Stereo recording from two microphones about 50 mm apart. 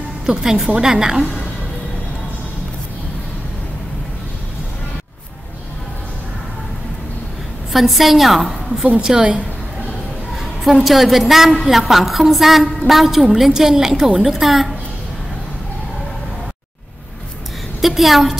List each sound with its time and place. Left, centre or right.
0.3 s a woman's voice: centre
7.7 s a woman's voice: centre
9.0 s a woman's voice: centre
10.4 s a woman's voice: centre
17.8 s a woman's voice: centre